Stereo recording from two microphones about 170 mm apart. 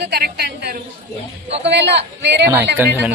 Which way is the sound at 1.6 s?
90° right.